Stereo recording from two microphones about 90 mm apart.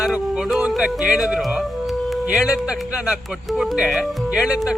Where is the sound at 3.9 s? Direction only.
10° right (ahead or behind).